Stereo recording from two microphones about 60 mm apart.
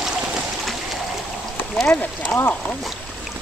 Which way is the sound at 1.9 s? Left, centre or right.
Left.